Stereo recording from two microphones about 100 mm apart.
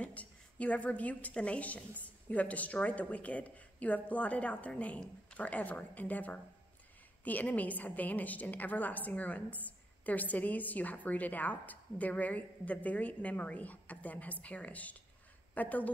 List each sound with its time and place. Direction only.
0.0 s a woman's voice: 15° left (ahead or behind)